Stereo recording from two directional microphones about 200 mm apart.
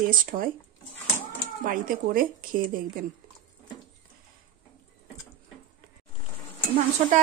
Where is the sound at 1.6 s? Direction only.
45° right (ahead or behind).